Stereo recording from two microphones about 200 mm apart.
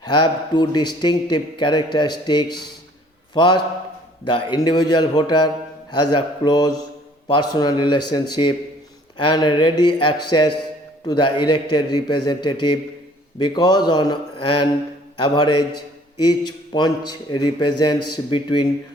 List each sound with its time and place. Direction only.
0.0 s a man's voice: 20° left (ahead or behind)